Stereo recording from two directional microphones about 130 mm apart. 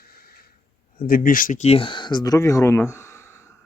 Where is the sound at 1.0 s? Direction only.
90° left.